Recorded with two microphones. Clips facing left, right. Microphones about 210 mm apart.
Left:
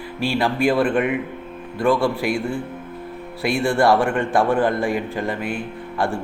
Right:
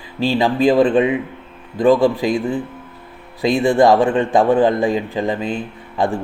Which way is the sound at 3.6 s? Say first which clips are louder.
Right 4 dB; 20° right (ahead or behind).